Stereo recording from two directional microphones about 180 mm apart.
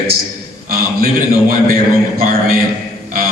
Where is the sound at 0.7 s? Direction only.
55° right (ahead or behind).